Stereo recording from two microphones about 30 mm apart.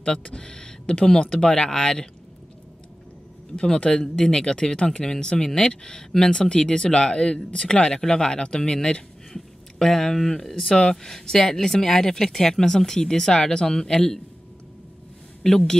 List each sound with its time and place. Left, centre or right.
0.4 s speech: left
3.5 s speech: left
9.3 s speech: centre
15.4 s speech: centre